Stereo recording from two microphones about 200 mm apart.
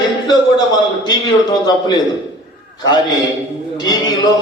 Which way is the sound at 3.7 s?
20° left (ahead or behind).